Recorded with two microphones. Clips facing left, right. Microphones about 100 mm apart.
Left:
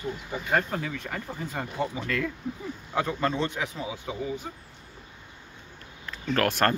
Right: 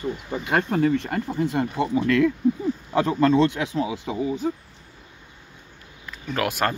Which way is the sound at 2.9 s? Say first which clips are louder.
Right 8 dB; 90° right.